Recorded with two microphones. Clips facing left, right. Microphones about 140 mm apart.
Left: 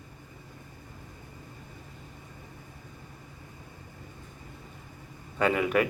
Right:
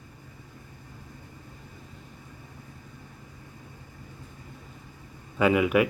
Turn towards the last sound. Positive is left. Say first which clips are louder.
# right 3 dB
turn(degrees=-10)  # may be behind; listen again after turning